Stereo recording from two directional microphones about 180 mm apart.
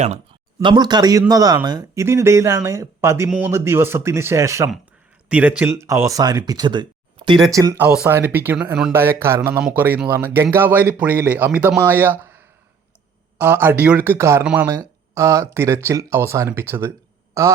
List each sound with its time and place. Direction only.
0.0 s speech: 40° right (ahead or behind)
0.6 s speech: 25° right (ahead or behind)